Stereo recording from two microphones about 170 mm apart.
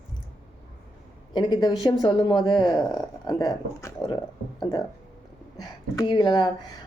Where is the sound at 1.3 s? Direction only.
25° left (ahead or behind).